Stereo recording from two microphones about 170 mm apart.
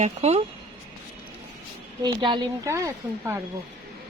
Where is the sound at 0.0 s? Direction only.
40° right (ahead or behind).